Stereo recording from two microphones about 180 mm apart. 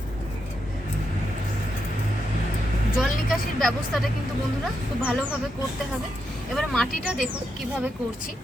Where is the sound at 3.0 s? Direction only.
Centre (ahead or behind).